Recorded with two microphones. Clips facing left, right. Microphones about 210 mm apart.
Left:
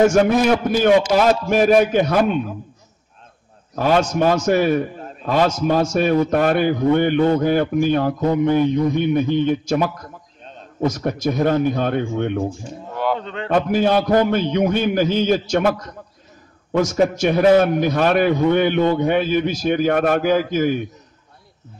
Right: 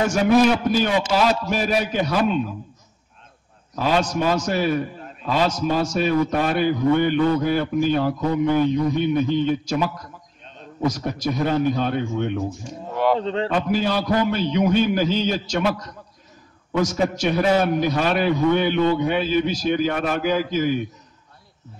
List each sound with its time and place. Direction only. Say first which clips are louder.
0.1 s a man's voice: left 1 dB; 50° left (ahead or behind)
3.7 s a man's voice: left 4 dB; 50° left (ahead or behind)
8.5 s a man's voice: left 1 dB; 15° left (ahead or behind)
8.9 s a man's voice: left 2 dB; 55° left (ahead or behind)
10.9 s a man's voice: left 3 dB; 50° left (ahead or behind)
13.2 s speech: right 6 dB; 30° right (ahead or behind)
13.5 s a man's voice: left 8 dB; 50° left (ahead or behind)